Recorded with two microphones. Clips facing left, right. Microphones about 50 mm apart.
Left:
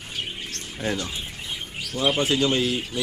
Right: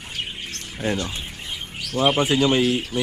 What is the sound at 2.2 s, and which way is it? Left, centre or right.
Speech, right.